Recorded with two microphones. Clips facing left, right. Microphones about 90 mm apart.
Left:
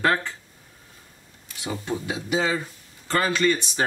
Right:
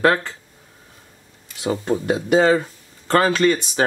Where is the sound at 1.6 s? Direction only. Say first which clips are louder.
Right 8 dB; 50° right (ahead or behind).